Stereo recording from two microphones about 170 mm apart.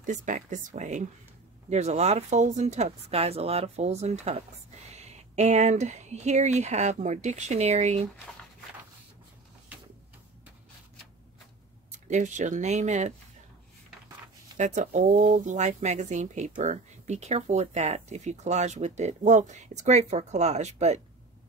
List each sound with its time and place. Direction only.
0.0 s speech: 50° right (ahead or behind)
11.9 s speech: 45° right (ahead or behind)
14.6 s speech: 45° right (ahead or behind)